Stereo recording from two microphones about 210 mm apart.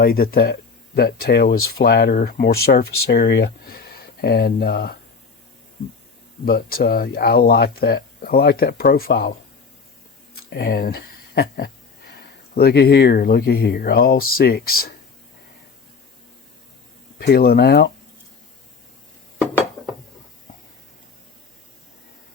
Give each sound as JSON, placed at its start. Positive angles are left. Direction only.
{"t": 0.0, "sound": "speech", "side_deg": 45}
{"t": 6.4, "sound": "speech", "side_deg": 45}
{"t": 10.3, "sound": "speech", "side_deg": 50}
{"t": 17.2, "sound": "speech", "side_deg": 45}